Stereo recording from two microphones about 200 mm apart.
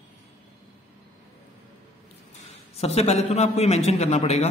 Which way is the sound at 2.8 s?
30° left (ahead or behind).